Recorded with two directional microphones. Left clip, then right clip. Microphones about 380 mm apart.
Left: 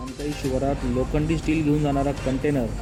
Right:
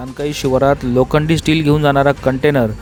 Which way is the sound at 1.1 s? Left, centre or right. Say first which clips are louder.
Right 10 dB; right.